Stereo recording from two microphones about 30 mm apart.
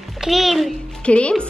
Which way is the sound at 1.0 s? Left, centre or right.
Left.